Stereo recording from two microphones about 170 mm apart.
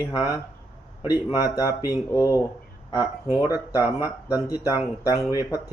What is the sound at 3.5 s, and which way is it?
Speech, 20° left (ahead or behind).